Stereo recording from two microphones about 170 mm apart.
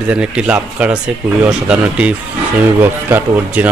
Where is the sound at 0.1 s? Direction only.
5° right (ahead or behind).